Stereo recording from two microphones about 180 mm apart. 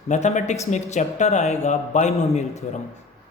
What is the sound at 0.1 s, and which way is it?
A man's voice, 40° left (ahead or behind).